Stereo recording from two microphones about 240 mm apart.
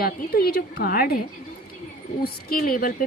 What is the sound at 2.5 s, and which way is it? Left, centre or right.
Speech, left.